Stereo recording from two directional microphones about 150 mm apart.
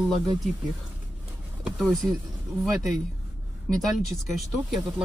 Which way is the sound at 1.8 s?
Centre (ahead or behind).